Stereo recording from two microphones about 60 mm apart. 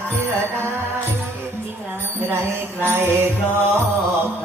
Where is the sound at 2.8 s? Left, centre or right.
Right.